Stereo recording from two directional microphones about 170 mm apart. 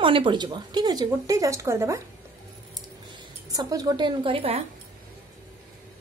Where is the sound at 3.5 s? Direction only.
20° right (ahead or behind).